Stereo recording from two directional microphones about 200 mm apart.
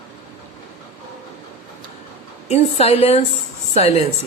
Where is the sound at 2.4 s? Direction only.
30° left (ahead or behind).